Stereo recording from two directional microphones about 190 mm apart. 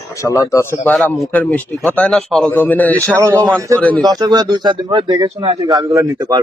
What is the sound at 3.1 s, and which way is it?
Speech, 15° right (ahead or behind).